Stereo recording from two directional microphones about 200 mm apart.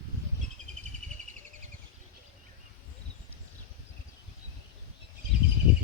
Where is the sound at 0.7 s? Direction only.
35° right (ahead or behind).